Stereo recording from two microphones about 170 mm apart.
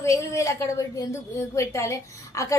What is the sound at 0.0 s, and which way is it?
A woman's voice, 15° left (ahead or behind).